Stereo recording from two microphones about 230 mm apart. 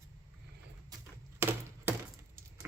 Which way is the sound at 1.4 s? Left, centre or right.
Centre.